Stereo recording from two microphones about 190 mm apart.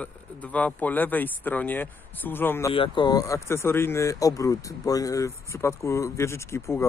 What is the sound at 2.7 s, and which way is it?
Speech, 25° left (ahead or behind).